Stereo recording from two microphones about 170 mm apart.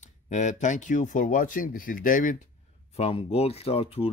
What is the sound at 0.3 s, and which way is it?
Speech, 45° left (ahead or behind).